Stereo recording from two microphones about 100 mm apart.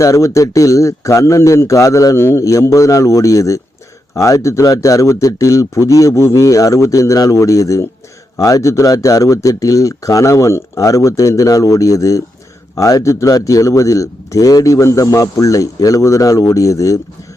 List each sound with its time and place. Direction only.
0.0 s speech: 30° left (ahead or behind)